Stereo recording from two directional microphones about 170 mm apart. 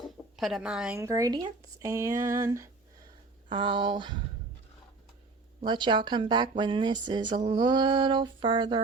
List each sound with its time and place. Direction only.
0.0 s a sound: centre (ahead or behind)
0.9 s speech: 20° right (ahead or behind)
3.5 s speech: 30° right (ahead or behind)
5.5 s speech: 25° right (ahead or behind)